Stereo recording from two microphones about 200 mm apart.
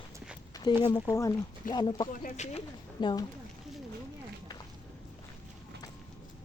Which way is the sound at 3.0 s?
20° left (ahead or behind).